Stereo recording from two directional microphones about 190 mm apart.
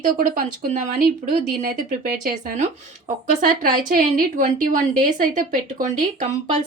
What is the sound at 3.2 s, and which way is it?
A woman's voice, 50° right (ahead or behind).